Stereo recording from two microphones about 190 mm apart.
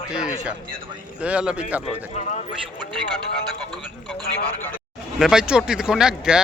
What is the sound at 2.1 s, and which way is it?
Speech, 40° left (ahead or behind).